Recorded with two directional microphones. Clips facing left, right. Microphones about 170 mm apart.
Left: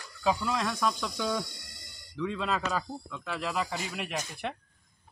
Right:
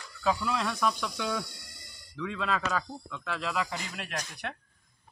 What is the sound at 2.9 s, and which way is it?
Speech, 10° left (ahead or behind).